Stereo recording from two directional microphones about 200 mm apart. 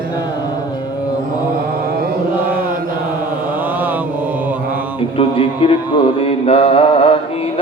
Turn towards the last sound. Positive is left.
turn(degrees=30)  # may be behind; listen again after turning